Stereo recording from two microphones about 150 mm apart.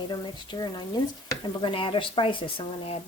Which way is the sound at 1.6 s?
35° left (ahead or behind).